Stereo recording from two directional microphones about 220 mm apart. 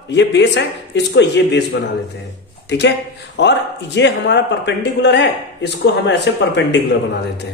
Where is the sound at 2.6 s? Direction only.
50° left (ahead or behind).